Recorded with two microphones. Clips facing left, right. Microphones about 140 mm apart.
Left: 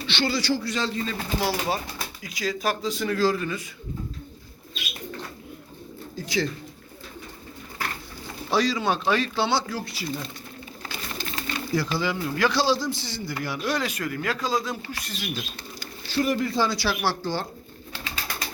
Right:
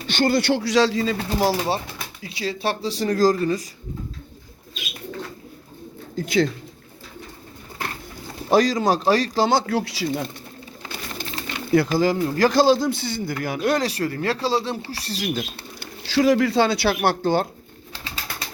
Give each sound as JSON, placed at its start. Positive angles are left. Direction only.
{"t": 0.1, "sound": "speech", "side_deg": -50}
{"t": 1.4, "sound": "speech", "side_deg": -35}
{"t": 6.1, "sound": "speech", "side_deg": -55}
{"t": 8.4, "sound": "speech", "side_deg": -45}
{"t": 9.7, "sound": "speech", "side_deg": -85}
{"t": 11.2, "sound": "bird", "side_deg": -20}
{"t": 11.7, "sound": "a man's voice", "side_deg": -50}
{"t": 13.8, "sound": "speech", "side_deg": -35}
{"t": 15.4, "sound": "speech", "side_deg": -75}
{"t": 18.0, "sound": "bird", "side_deg": -30}